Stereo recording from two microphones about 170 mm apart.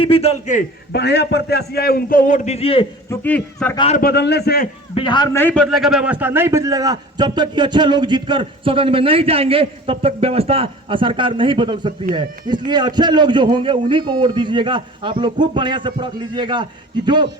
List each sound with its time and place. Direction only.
0.0 s a man's voice: 35° left (ahead or behind)
0.9 s a man's voice: 80° left; by 2.8 s 35° left (ahead or behind)
3.1 s speech: 10° left (ahead or behind)
3.9 s a man's voice: 70° left (ahead or behind)
4.9 s a man's voice: 25° left (ahead or behind)
5.3 s speech: 10° left (ahead or behind)
5.7 s a man's voice: centre (ahead or behind); by 16.6 s 25° right (ahead or behind)